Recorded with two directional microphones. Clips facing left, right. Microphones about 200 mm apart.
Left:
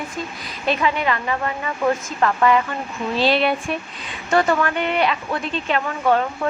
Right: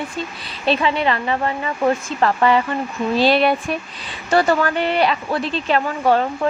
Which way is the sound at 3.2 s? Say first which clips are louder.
Right 2 dB; 45° right (ahead or behind).